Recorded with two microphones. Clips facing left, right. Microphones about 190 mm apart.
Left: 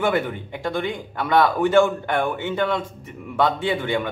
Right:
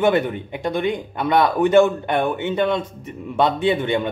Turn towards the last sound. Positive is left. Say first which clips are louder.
# right 4 dB
turn(degrees=-20)  # may be behind; listen again after turning